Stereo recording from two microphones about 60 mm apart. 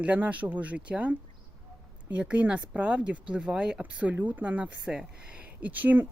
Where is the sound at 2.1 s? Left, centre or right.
Right.